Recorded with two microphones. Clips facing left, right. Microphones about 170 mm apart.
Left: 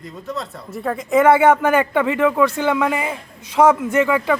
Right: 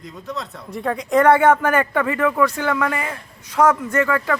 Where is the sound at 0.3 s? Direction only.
Centre (ahead or behind).